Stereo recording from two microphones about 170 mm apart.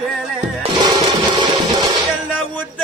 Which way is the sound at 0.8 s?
25° right (ahead or behind).